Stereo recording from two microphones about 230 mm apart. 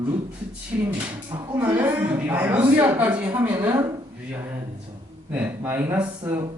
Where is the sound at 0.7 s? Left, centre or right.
Centre.